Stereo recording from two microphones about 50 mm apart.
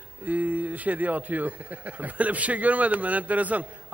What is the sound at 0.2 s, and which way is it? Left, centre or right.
A man's voice, right.